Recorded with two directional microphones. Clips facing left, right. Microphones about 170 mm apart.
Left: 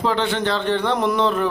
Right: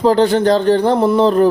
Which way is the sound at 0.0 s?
40° right (ahead or behind).